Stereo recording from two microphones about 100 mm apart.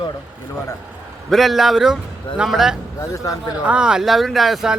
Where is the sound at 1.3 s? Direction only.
Centre (ahead or behind).